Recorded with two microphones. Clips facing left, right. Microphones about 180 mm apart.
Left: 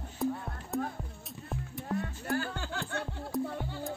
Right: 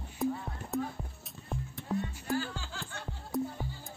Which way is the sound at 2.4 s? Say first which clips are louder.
Left 3 dB; 60° left (ahead or behind).